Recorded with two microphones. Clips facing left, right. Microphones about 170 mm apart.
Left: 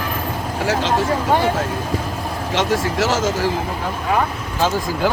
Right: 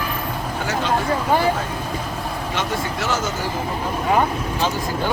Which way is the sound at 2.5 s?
90° left.